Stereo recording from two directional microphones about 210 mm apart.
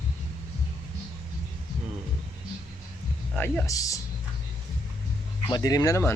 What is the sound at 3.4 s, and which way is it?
Speech, 10° left (ahead or behind).